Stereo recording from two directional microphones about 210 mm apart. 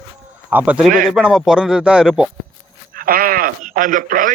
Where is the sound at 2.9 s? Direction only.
45° right (ahead or behind).